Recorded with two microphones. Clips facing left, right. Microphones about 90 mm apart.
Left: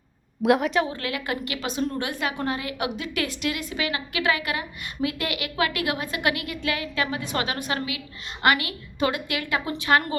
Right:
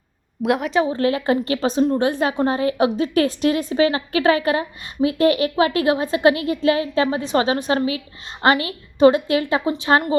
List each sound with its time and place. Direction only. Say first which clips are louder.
0.4 s a woman's voice: even; centre (ahead or behind)
0.8 s a woman's voice: right 7 dB; 30° right (ahead or behind)